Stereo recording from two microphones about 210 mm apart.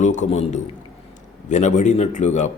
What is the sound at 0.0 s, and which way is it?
A man's voice, 35° left (ahead or behind).